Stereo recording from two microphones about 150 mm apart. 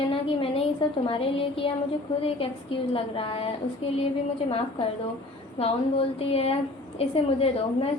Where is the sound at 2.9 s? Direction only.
40° left (ahead or behind).